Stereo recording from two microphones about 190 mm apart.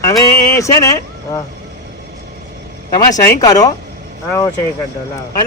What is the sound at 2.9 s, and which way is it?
Speech, 20° left (ahead or behind).